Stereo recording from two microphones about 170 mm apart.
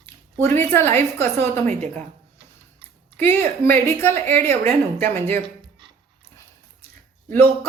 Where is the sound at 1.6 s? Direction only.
45° right (ahead or behind).